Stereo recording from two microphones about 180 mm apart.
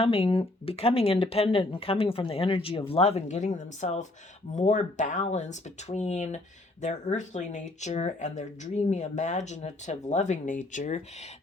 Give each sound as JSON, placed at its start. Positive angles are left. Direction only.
{"t": 0.0, "sound": "speech", "side_deg": 30}